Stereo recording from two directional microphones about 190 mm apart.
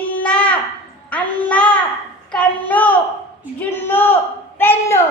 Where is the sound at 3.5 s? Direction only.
10° left (ahead or behind).